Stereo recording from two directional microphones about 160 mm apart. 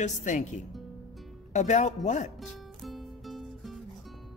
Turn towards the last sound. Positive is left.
turn(degrees=0)  # may be behind; listen again after turning